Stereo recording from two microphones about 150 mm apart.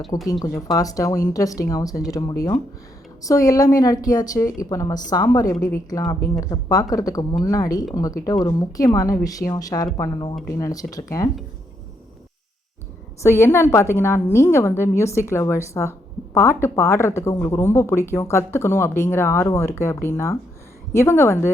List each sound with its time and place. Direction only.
0.3 s speech: 25° left (ahead or behind)
13.2 s a woman's voice: 15° left (ahead or behind)